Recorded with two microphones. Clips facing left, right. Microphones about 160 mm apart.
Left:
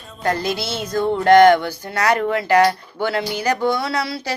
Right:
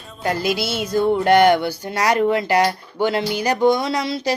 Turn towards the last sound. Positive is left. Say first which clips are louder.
# right 2 dB
turn(degrees=-15)  # may be behind; listen again after turning